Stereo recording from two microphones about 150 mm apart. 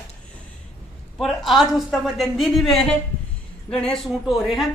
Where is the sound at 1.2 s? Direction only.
Centre (ahead or behind).